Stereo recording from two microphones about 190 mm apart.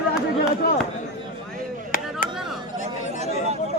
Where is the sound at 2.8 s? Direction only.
35° right (ahead or behind).